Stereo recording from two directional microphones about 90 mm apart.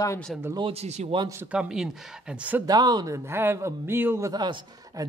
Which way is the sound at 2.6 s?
50° right (ahead or behind).